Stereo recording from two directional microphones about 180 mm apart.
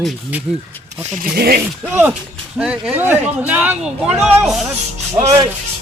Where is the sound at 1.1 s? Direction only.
55° right (ahead or behind).